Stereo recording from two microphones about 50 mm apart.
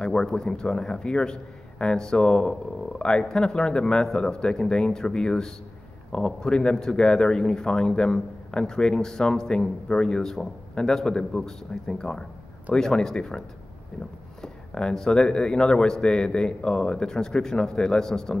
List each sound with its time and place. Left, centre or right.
0.0 s a man's voice: centre
14.4 s a man's voice: centre